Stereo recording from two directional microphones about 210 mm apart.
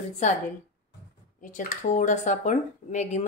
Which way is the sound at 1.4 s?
40° left (ahead or behind).